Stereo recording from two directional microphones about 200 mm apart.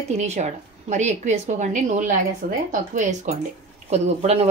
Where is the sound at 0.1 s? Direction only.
35° right (ahead or behind).